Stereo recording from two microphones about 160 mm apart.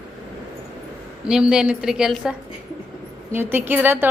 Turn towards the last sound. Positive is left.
turn(degrees=-10)  # may be behind; listen again after turning